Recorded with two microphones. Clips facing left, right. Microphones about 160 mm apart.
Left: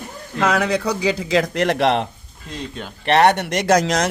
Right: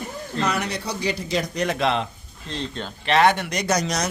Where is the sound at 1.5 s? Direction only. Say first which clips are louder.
Left 5 dB; 85° left; by 2.0 s 70° left (ahead or behind).